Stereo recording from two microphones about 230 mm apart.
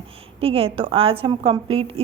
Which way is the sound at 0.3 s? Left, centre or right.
Right.